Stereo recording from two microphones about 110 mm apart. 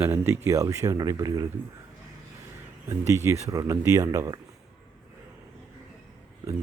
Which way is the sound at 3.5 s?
30° right (ahead or behind).